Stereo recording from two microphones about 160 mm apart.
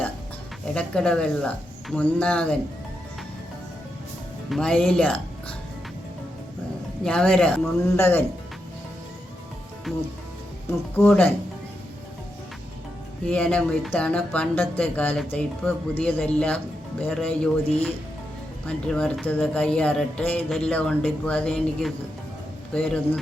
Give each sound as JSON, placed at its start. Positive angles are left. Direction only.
{"t": 0.7, "sound": "speech", "side_deg": 5}
{"t": 4.4, "sound": "speech", "side_deg": 5}
{"t": 7.0, "sound": "speech", "side_deg": 5}
{"t": 9.9, "sound": "speech", "side_deg": 0}
{"t": 10.9, "sound": "speech", "side_deg": 15}
{"t": 13.2, "sound": "speech", "side_deg": 5}
{"t": 18.6, "sound": "speech", "side_deg": 5}